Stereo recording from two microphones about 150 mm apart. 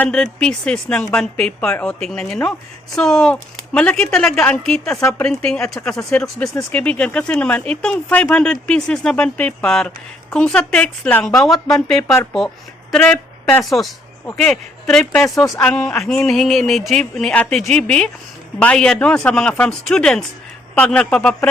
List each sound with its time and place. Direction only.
0.0 s speech: 5° left (ahead or behind)